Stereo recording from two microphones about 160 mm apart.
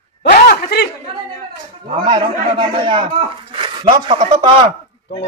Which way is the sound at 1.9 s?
30° right (ahead or behind).